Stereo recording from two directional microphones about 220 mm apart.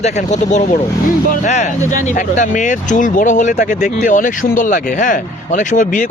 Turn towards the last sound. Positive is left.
turn(degrees=35)  # may be behind; listen again after turning